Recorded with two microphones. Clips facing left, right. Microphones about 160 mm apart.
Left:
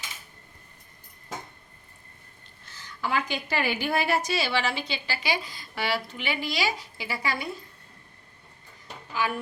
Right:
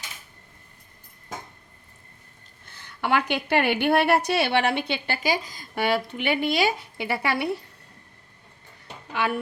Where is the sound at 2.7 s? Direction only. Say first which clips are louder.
Right 5 dB; 60° right (ahead or behind).